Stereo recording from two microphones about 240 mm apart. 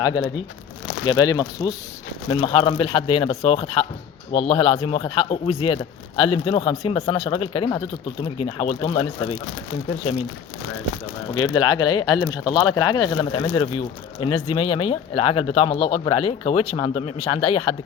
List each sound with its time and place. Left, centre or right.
0.0 s speech: centre
11.3 s speech: centre